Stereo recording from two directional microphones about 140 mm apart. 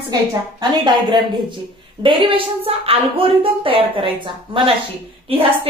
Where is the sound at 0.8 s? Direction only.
35° right (ahead or behind).